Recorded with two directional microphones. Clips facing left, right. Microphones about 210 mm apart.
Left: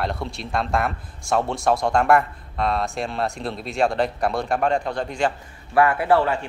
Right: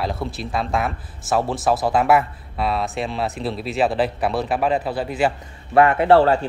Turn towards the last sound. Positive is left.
turn(degrees=-25)  # may be behind; listen again after turning